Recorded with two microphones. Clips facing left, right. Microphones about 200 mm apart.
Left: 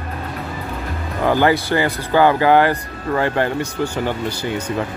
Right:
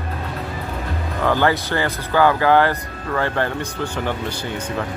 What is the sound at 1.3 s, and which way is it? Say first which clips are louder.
Speech: left 3 dB; 15° left (ahead or behind).